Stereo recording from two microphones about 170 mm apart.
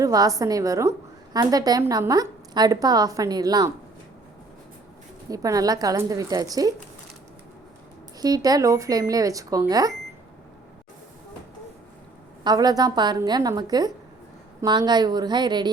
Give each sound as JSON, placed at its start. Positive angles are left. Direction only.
{"t": 0.0, "sound": "a woman's voice", "side_deg": -20}
{"t": 5.3, "sound": "a woman's voice", "side_deg": -20}
{"t": 8.2, "sound": "a woman's voice", "side_deg": -20}
{"t": 12.5, "sound": "a woman's voice", "side_deg": -25}